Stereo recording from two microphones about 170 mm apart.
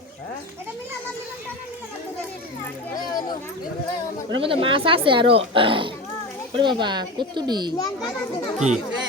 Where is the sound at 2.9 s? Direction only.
25° left (ahead or behind).